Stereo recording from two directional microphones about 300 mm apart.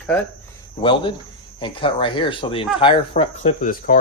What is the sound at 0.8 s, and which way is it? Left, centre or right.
Speech, centre.